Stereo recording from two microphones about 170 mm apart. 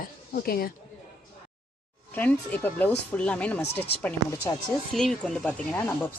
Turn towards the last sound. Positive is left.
turn(degrees=10)  # may be behind; listen again after turning